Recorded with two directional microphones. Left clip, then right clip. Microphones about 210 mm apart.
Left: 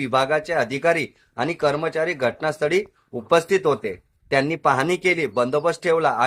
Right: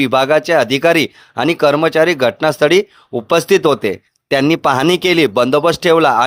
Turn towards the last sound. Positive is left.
turn(degrees=-45)  # may be behind; listen again after turning